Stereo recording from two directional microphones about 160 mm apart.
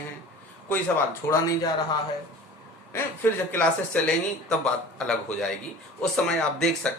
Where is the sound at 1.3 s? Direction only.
20° left (ahead or behind).